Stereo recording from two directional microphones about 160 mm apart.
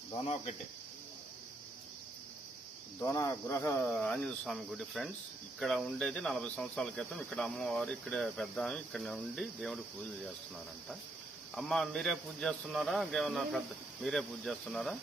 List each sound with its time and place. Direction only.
3.0 s cricket: 20° left (ahead or behind)
4.0 s speech: 5° left (ahead or behind)
11.5 s speech: 5° left (ahead or behind)